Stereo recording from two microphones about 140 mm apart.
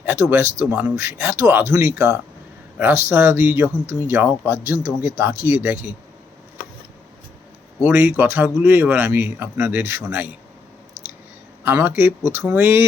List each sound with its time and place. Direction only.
0.0 s a man's voice: 15° right (ahead or behind)
7.8 s a man's voice: 10° right (ahead or behind)
11.6 s a man's voice: 15° right (ahead or behind)